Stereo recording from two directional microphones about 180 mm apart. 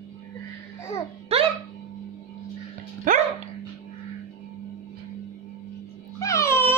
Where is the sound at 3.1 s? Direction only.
50° right (ahead or behind).